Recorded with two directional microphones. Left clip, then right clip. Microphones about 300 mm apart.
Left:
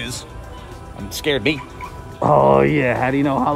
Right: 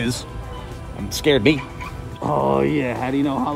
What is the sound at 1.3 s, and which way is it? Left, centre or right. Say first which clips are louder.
Speech: right 3 dB; centre.